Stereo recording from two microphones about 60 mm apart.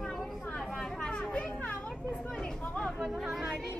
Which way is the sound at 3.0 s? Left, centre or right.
Centre.